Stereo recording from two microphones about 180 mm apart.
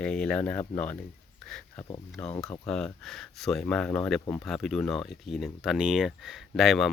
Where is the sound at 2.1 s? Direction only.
5° left (ahead or behind).